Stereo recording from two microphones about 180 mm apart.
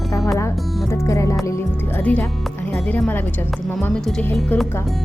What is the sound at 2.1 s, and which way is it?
Speech, 10° left (ahead or behind).